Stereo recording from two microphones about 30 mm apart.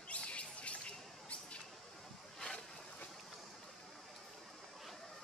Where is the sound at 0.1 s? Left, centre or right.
Left.